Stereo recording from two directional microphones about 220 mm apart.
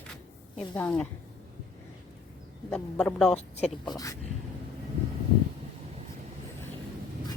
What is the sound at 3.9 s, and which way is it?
Speech, 15° left (ahead or behind).